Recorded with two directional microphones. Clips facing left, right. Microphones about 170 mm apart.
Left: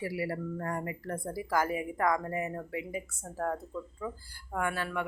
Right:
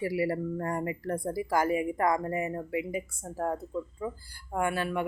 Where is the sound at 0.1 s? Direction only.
15° right (ahead or behind).